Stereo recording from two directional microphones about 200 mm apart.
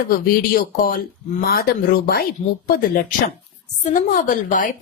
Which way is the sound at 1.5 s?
50° left (ahead or behind).